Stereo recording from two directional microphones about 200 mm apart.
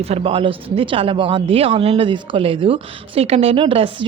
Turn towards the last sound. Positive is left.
turn(degrees=-25)  # may be behind; listen again after turning